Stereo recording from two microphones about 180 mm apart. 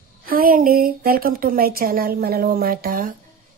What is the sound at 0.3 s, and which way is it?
A woman's voice, 55° right (ahead or behind).